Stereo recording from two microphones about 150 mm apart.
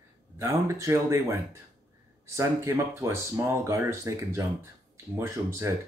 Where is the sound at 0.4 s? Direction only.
20° right (ahead or behind).